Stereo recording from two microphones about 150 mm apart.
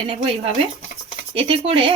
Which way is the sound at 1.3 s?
40° right (ahead or behind).